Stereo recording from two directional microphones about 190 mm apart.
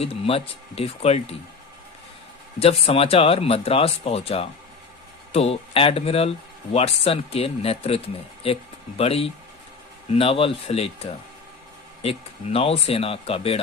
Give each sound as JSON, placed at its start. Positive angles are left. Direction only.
{"t": 0.0, "sound": "speech", "side_deg": 30}
{"t": 2.6, "sound": "speech", "side_deg": 30}